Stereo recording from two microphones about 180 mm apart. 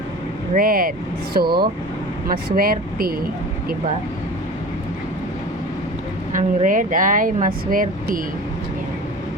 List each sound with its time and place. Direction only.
0.5 s speech: 55° right (ahead or behind)
2.6 s speech: 55° right (ahead or behind)
6.3 s speech: 45° right (ahead or behind)